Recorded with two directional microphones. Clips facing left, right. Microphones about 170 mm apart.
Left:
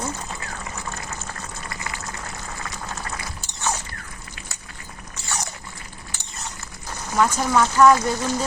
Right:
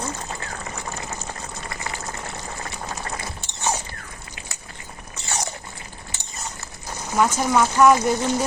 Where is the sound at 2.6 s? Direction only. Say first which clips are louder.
Even; 30° right (ahead or behind).